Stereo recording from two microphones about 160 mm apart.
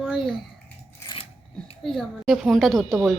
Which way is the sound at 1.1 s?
35° left (ahead or behind).